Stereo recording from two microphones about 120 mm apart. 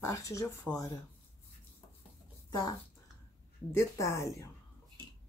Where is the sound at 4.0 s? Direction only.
25° left (ahead or behind).